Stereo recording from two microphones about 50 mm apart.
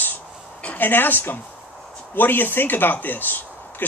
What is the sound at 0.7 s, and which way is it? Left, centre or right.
Speech, left.